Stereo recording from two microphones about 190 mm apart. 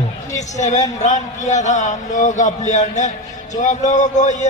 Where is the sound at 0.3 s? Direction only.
40° left (ahead or behind).